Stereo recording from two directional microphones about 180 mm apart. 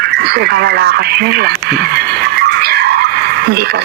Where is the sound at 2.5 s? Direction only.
65° right (ahead or behind).